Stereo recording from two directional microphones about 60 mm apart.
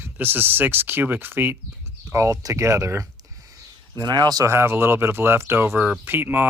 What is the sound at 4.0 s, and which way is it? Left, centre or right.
Speech, right.